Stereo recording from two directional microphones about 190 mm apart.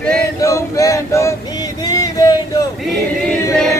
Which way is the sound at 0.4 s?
15° left (ahead or behind).